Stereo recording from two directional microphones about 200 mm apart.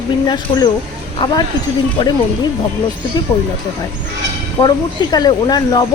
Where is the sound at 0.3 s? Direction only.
20° left (ahead or behind).